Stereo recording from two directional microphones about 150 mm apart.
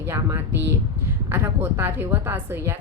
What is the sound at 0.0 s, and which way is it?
A woman's voice, 15° right (ahead or behind).